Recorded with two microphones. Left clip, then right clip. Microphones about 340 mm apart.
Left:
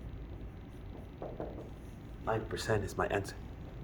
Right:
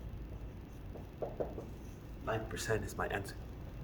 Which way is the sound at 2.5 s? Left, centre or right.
Left.